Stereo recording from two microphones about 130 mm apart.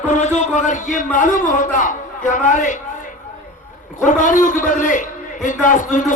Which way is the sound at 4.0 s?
75° left (ahead or behind).